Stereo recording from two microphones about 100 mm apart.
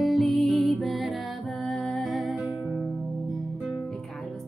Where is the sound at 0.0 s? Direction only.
Centre (ahead or behind).